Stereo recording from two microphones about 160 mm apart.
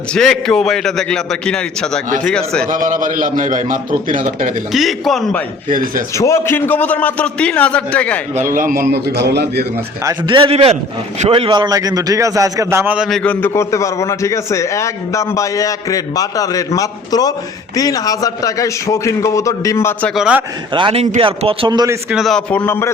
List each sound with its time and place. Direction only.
0.1 s a man's voice: 5° left (ahead or behind)
2.6 s a man's voice: 55° right (ahead or behind)
4.7 s a man's voice: centre (ahead or behind)
5.6 s a man's voice: 60° right (ahead or behind)
6.1 s a man's voice: 20° left (ahead or behind)
8.5 s a man's voice: 60° right (ahead or behind); by 9.6 s 90° right
10.2 s a man's voice: 35° right (ahead or behind); by 13.1 s 10° right (ahead or behind)
13.1 s a man's voice: centre (ahead or behind)
13.4 s a man's voice: 20° left (ahead or behind)
20.1 s a man's voice: 5° right (ahead or behind)
20.7 s speech: 35° right (ahead or behind)
22.1 s a man's voice: centre (ahead or behind)